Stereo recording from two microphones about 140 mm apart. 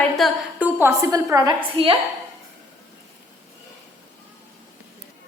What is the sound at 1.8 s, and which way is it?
Speech, 40° right (ahead or behind).